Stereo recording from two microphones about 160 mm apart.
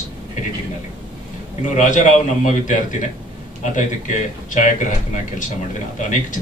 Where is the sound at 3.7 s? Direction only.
50° left (ahead or behind).